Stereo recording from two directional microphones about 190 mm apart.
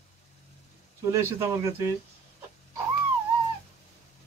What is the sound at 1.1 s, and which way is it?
Speech, 15° right (ahead or behind).